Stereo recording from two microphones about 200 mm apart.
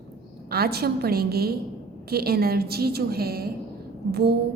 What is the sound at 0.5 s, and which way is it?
A woman's voice, 50° right (ahead or behind).